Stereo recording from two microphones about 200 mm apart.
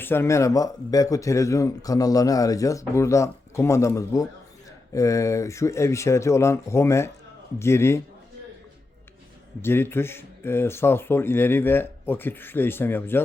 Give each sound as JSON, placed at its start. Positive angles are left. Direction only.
{"t": 0.0, "sound": "speech", "side_deg": 10}
{"t": 9.6, "sound": "speech", "side_deg": 10}